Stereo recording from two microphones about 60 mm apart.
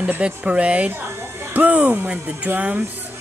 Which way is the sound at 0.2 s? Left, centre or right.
Right.